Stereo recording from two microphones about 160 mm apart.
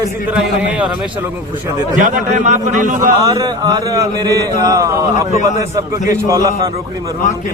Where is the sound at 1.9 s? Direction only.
55° right (ahead or behind).